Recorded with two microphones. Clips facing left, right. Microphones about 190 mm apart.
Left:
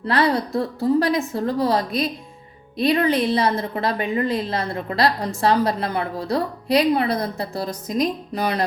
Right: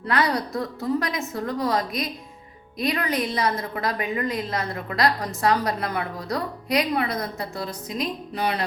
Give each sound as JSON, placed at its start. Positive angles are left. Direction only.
{"t": 0.1, "sound": "a woman's voice", "side_deg": 30}